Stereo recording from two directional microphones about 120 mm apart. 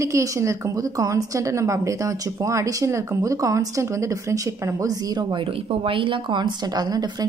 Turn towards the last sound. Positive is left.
turn(degrees=-35)  # may be behind; listen again after turning